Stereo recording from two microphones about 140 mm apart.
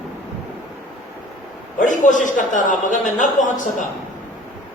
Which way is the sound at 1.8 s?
65° left (ahead or behind).